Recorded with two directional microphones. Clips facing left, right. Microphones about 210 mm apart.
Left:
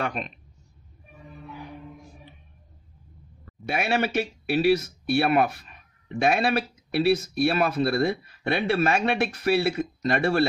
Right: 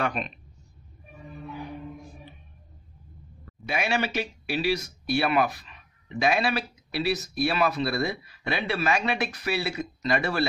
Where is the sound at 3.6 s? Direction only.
50° left (ahead or behind).